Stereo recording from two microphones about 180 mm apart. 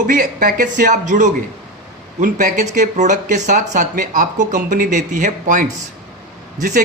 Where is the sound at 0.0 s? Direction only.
50° right (ahead or behind).